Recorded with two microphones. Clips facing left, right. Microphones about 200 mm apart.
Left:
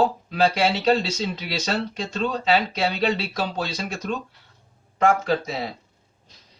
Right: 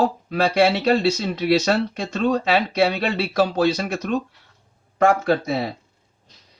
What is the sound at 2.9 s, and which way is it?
Speech, 60° right (ahead or behind).